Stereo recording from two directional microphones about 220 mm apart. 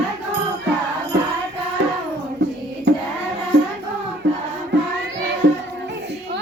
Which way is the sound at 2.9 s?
55° right (ahead or behind).